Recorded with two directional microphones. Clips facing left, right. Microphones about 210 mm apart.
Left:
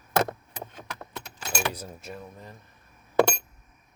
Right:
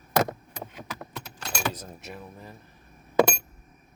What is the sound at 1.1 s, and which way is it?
Keys jangling, 5° left (ahead or behind).